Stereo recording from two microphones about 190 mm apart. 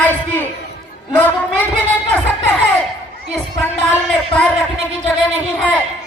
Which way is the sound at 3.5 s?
5° left (ahead or behind).